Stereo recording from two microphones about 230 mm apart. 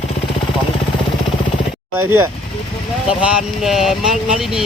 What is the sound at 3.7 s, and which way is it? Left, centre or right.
Speech, centre.